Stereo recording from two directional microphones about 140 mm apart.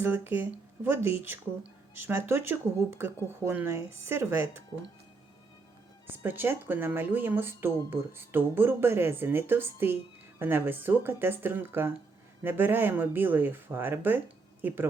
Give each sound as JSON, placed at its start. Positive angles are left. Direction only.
{"t": 0.0, "sound": "speech", "side_deg": -15}
{"t": 6.1, "sound": "speech", "side_deg": -15}